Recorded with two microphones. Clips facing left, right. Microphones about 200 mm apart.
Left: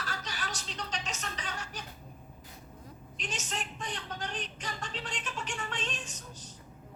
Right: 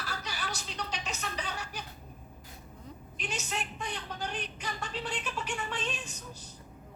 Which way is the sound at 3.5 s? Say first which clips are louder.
Right 2 dB; 10° right (ahead or behind).